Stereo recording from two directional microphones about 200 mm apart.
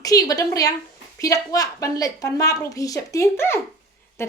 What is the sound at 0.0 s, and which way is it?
Speech, 20° left (ahead or behind).